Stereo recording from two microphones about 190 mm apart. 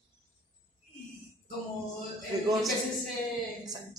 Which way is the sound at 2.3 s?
20° right (ahead or behind).